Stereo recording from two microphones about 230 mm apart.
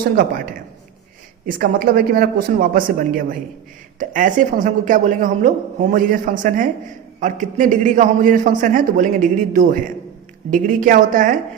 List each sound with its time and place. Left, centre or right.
0.0 s a man's voice: right
1.5 s a man's voice: right
4.1 s a man's voice: right